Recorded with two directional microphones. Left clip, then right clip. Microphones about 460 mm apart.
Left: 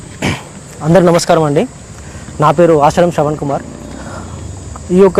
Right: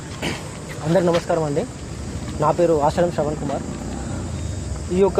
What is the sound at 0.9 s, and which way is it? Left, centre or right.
Speech, left.